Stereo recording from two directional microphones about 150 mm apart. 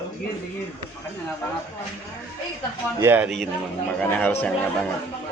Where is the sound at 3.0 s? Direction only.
15° right (ahead or behind).